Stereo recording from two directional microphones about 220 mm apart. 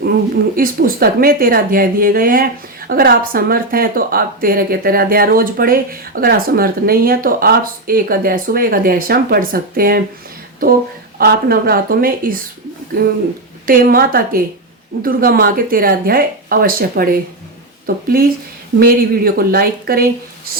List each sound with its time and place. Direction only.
0.5 s a woman's voice: 40° right (ahead or behind)
11.2 s a woman's voice: 45° right (ahead or behind)